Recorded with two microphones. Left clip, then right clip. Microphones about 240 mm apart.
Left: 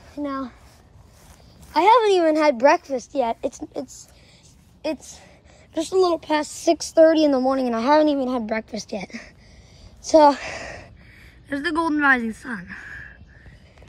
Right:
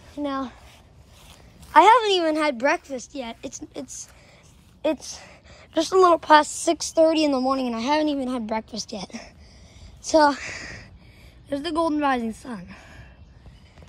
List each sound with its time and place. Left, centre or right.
0.2 s speech: left
1.7 s a woman's voice: centre
4.8 s a woman's voice: centre
6.5 s a woman's voice: centre